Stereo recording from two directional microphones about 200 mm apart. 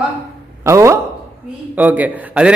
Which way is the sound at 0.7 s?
15° right (ahead or behind).